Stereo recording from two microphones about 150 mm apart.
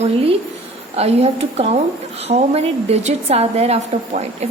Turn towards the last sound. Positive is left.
turn(degrees=-45)  # may be behind; listen again after turning